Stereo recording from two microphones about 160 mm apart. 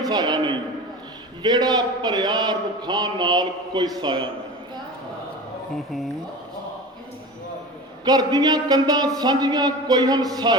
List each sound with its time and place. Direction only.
0.1 s a man's voice: 25° right (ahead or behind)
8.0 s a man's voice: 25° right (ahead or behind)